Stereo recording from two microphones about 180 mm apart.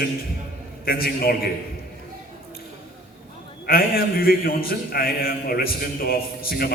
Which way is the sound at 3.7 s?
55° left (ahead or behind).